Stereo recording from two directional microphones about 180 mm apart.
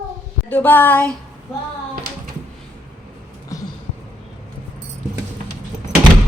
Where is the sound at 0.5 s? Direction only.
10° left (ahead or behind).